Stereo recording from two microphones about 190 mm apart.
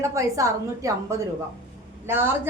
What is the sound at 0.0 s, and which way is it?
A woman's voice, 15° right (ahead or behind).